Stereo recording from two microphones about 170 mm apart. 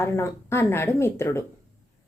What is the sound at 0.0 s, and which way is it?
A woman's voice, 15° left (ahead or behind).